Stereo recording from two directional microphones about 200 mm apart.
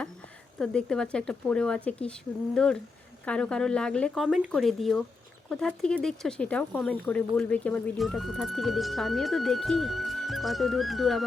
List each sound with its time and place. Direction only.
0.6 s speech: 5° left (ahead or behind)
3.2 s speech: 5° left (ahead or behind)